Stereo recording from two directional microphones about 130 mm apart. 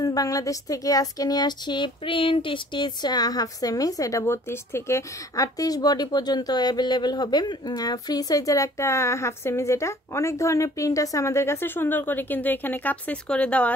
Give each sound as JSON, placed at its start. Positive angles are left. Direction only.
{"t": 0.0, "sound": "speech", "side_deg": 30}